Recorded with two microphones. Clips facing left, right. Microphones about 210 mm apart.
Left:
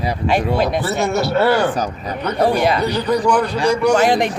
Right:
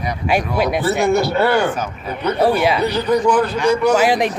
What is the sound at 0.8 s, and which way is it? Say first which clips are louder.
Speech: right 3 dB; centre (ahead or behind).